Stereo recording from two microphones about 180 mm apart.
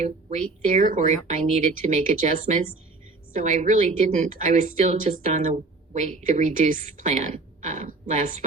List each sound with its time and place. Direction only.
0.0 s speech: 40° right (ahead or behind)